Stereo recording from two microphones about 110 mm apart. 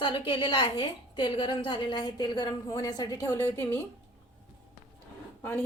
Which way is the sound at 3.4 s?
20° left (ahead or behind).